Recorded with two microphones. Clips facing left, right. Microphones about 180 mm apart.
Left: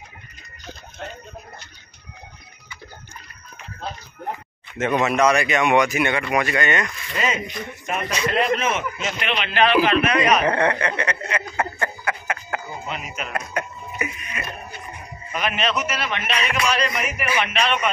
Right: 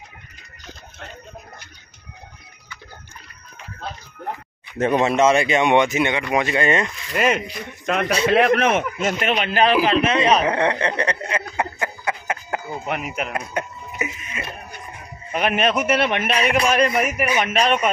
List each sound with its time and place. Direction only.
4.7 s speech: 30° right (ahead or behind)
7.2 s a man's voice: 60° right (ahead or behind)
7.8 s a man's voice: 75° right (ahead or behind); by 9.8 s 40° right (ahead or behind)
9.8 s speech: 25° right (ahead or behind)
10.4 s speech: 15° right (ahead or behind); by 11.4 s 30° right (ahead or behind)
11.5 s a sound: 20° right (ahead or behind)
12.8 s speech: 65° right (ahead or behind)
13.3 s a sound: 20° right (ahead or behind)
15.3 s a man's voice: 55° right (ahead or behind)